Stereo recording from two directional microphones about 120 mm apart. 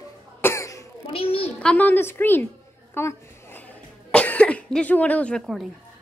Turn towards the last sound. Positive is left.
turn(degrees=10)  # may be behind; listen again after turning